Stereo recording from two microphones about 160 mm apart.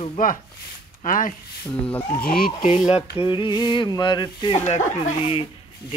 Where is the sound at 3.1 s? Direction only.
30° left (ahead or behind).